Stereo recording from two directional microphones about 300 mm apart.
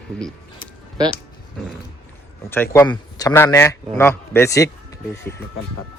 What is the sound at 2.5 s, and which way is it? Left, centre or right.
Speech, centre.